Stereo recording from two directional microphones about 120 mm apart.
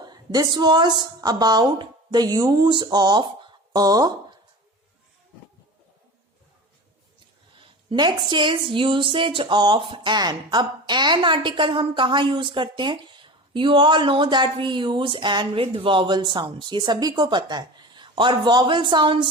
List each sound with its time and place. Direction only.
0.0 s a woman's voice: 35° right (ahead or behind)
7.9 s speech: 40° right (ahead or behind)